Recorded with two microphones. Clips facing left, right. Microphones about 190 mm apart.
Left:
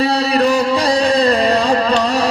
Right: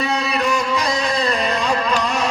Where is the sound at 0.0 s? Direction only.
35° left (ahead or behind).